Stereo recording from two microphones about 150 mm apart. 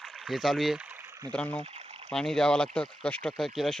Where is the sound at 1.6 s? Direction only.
45° right (ahead or behind).